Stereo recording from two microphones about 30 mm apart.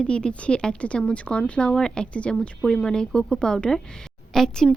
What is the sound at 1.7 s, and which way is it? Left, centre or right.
A woman's voice, left.